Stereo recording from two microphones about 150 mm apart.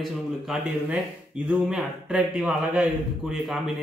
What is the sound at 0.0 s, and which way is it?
A man's voice, 5° right (ahead or behind).